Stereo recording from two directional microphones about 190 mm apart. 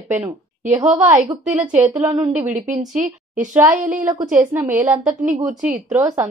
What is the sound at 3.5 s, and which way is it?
Speech, 5° right (ahead or behind).